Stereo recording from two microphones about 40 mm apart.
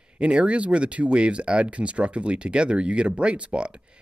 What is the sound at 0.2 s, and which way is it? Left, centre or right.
Speech, right.